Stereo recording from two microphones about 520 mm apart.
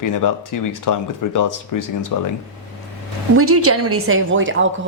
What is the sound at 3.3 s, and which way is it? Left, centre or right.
A woman's voice, right.